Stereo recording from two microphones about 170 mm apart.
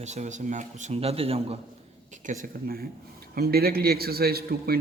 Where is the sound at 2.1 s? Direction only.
55° right (ahead or behind).